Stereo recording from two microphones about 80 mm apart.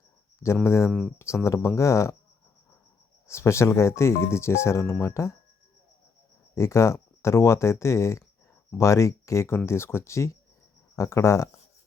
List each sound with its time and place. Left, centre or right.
0.4 s speech: left
0.9 s speech: centre
1.5 s speech: left
3.2 s speech: left
6.5 s speech: left